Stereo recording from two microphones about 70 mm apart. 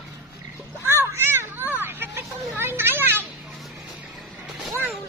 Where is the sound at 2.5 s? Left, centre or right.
Right.